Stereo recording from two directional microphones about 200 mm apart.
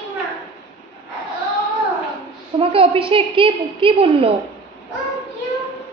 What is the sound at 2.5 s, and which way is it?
A woman's voice, 30° right (ahead or behind).